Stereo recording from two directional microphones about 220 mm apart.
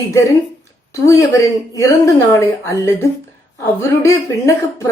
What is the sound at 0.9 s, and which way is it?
Speech, 15° left (ahead or behind).